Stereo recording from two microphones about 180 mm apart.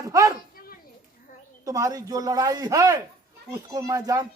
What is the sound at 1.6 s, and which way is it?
Speech, 20° right (ahead or behind).